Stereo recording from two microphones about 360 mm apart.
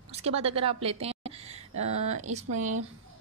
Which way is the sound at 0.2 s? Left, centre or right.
Centre.